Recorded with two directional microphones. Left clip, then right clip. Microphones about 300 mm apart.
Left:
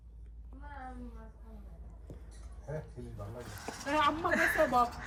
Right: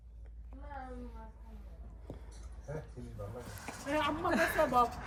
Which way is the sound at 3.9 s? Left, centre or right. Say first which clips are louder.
Left 3 dB; centre.